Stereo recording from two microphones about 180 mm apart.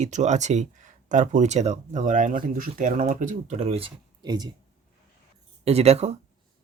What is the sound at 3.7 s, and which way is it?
Speech, 30° right (ahead or behind).